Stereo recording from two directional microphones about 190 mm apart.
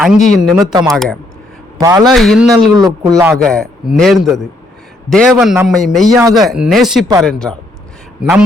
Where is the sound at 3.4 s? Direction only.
5° left (ahead or behind).